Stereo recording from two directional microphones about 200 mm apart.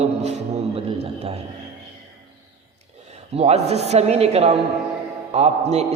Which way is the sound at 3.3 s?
30° right (ahead or behind).